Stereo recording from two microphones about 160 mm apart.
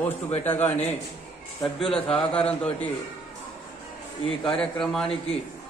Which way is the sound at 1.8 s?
35° left (ahead or behind).